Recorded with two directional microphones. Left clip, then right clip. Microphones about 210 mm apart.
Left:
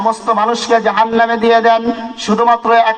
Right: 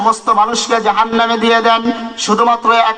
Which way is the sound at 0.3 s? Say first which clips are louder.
Even; 55° left (ahead or behind).